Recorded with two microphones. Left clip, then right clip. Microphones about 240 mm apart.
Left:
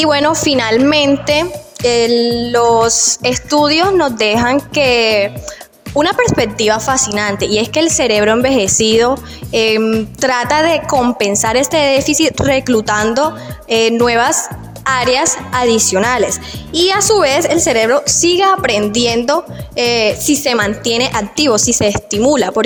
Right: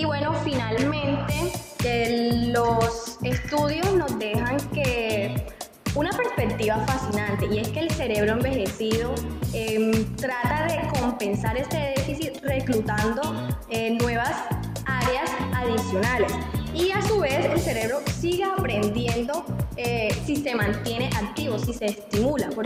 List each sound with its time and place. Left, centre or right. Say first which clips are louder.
0.0 s a woman's voice: left 14 dB; left
9.5 s music: left 14 dB; left
10.2 s a woman's voice: left 15 dB; left